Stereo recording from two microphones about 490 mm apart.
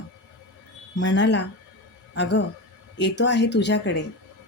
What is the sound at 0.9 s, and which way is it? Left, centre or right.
Speech, left.